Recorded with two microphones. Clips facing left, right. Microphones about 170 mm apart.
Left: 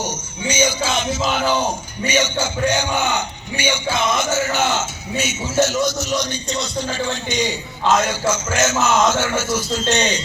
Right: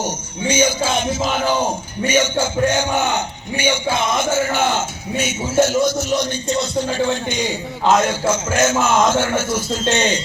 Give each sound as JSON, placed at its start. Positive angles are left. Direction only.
{"t": 0.0, "sound": "speech", "side_deg": -55}